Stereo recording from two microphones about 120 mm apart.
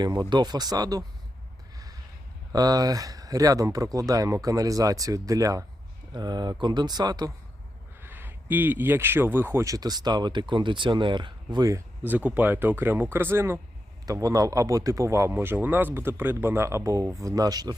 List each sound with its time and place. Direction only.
0.0 s speech: 35° right (ahead or behind)
2.5 s a man's voice: 30° right (ahead or behind)
8.0 s a man's voice: 20° right (ahead or behind); by 11.8 s 35° right (ahead or behind)
12.0 s a man's voice: 15° right (ahead or behind); by 17.7 s 35° right (ahead or behind)